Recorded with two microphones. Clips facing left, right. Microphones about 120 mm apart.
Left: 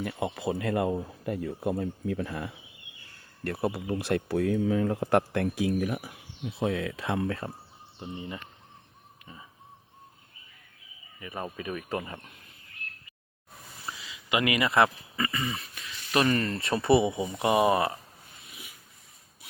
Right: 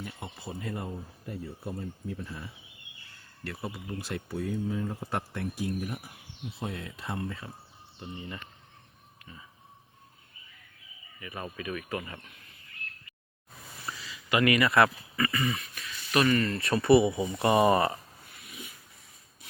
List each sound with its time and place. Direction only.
0.0 s speech: 90° left; by 2.5 s 70° left (ahead or behind)
3.4 s speech: 55° left (ahead or behind); by 7.4 s 80° left
8.0 s speech: 20° left (ahead or behind)
11.2 s speech: 20° left (ahead or behind)
13.8 s speech: 15° left (ahead or behind)
17.5 s speech: 5° left (ahead or behind)